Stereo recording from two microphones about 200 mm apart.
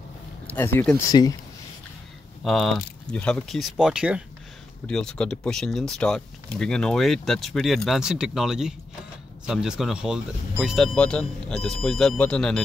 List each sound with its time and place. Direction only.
0.5 s speech: 10° left (ahead or behind)
2.4 s speech: centre (ahead or behind)